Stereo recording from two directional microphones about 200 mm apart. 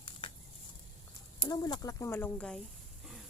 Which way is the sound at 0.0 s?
25° left (ahead or behind).